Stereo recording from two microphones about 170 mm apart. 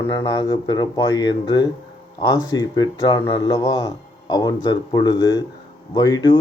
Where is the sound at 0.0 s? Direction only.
15° left (ahead or behind).